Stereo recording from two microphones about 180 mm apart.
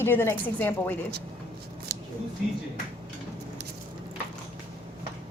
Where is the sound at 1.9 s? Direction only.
65° right (ahead or behind).